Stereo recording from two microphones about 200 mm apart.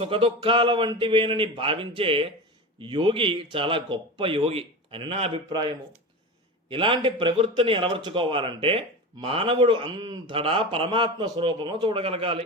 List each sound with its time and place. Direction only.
0.0 s a man's voice: 25° right (ahead or behind)